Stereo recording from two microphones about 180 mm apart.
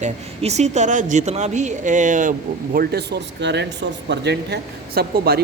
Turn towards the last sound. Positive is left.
turn(degrees=-60)  # may be behind; listen again after turning